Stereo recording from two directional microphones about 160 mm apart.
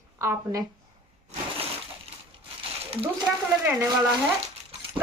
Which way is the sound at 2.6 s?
35° right (ahead or behind).